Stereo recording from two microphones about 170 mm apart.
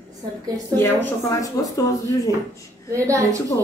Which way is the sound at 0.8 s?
15° left (ahead or behind).